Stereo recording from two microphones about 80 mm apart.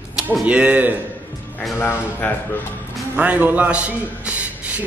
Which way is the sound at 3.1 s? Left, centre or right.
Centre.